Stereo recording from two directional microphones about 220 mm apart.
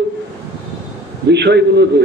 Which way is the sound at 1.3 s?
50° right (ahead or behind).